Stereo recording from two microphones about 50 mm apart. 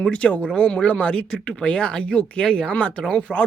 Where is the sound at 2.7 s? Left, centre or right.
Left.